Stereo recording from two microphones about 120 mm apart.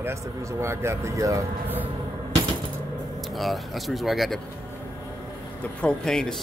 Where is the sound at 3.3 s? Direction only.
Centre (ahead or behind).